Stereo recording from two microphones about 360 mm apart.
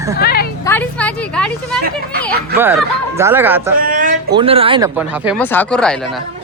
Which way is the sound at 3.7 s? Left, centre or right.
Right.